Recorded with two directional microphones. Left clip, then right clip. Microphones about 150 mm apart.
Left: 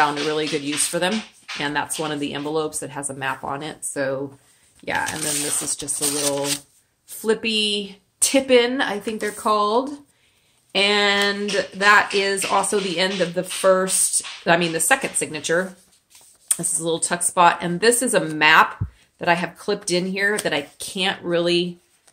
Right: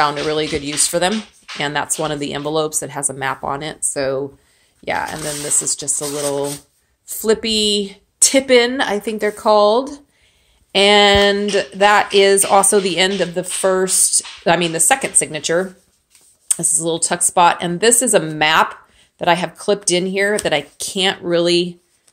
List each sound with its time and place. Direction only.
0.0 s speech: 35° right (ahead or behind)
7.1 s speech: 40° right (ahead or behind)
10.7 s speech: 45° right (ahead or behind)